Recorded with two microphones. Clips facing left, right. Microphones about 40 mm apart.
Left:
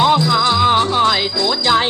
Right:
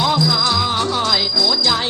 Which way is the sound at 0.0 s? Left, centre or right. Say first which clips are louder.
Left 4 dB; left.